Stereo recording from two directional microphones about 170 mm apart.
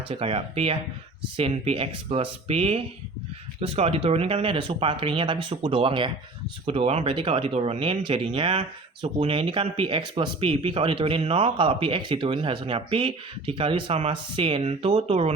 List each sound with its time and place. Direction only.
0.1 s speech: 35° right (ahead or behind)